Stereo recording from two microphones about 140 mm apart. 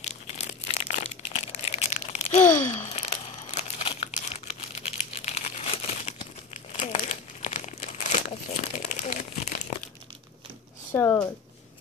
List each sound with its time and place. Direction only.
0.1 s crumpling: 50° left (ahead or behind)
10.9 s speech: 15° left (ahead or behind)